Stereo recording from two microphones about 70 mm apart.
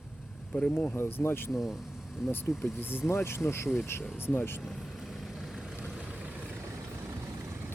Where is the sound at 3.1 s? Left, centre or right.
Left.